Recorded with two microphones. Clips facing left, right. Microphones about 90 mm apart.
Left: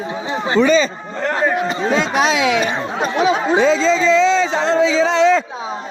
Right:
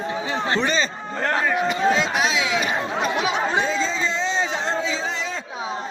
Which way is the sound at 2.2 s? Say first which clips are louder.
Left 6 dB; 70° left (ahead or behind).